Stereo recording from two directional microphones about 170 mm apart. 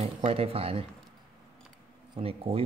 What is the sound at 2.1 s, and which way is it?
Speech, 35° right (ahead or behind).